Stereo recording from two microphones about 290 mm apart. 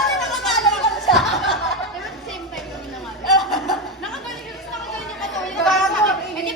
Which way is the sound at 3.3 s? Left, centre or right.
Centre.